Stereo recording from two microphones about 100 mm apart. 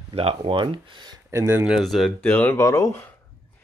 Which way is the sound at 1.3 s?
25° right (ahead or behind).